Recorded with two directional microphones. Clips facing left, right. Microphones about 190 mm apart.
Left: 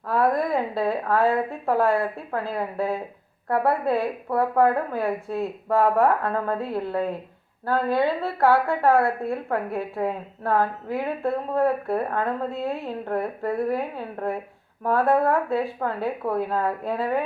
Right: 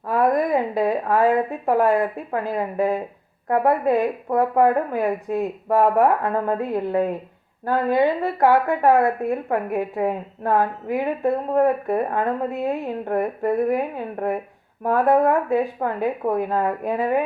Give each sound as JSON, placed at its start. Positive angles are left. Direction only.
{"t": 0.1, "sound": "a woman's voice", "side_deg": -15}